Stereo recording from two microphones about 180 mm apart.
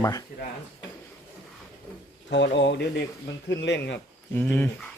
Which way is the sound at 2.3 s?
80° left.